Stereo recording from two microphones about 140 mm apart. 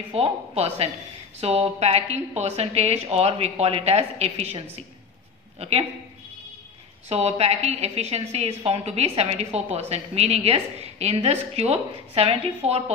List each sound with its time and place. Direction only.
0.1 s a woman's voice: 45° right (ahead or behind)
7.1 s a woman's voice: 50° right (ahead or behind)